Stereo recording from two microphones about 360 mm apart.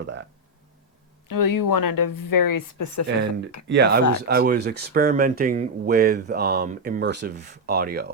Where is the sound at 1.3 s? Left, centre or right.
Left.